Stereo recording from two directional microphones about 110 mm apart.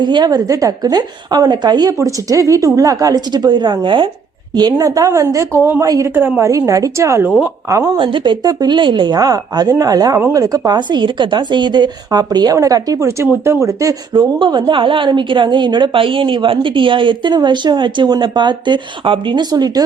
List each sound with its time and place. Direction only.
0.0 s a woman's voice: 40° right (ahead or behind)
4.5 s a woman's voice: 35° right (ahead or behind)
6.1 s a woman's voice: 20° right (ahead or behind)
6.5 s a woman's voice: 30° right (ahead or behind)
7.9 s a woman's voice: 45° right (ahead or behind); by 13.9 s 30° right (ahead or behind)
14.1 s a woman's voice: 45° right (ahead or behind)